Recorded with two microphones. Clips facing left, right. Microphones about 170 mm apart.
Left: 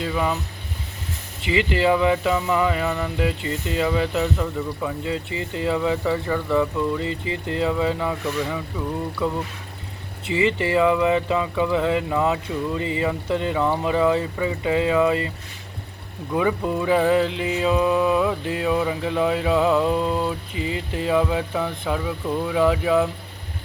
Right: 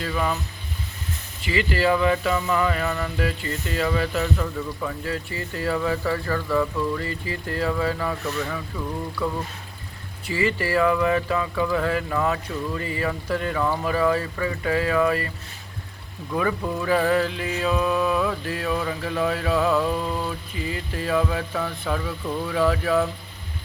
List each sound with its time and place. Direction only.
0.0 s mantra: 20° left (ahead or behind)
1.4 s mantra: 20° left (ahead or behind)
4.5 s speech: 10° left (ahead or behind)
5.0 s mantra: 20° left (ahead or behind)
10.2 s mantra: 20° left (ahead or behind)
16.3 s mantra: 15° left (ahead or behind)